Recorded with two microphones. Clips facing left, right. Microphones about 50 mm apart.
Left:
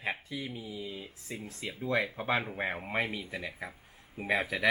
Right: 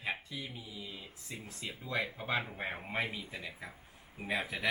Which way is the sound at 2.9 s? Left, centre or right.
Left.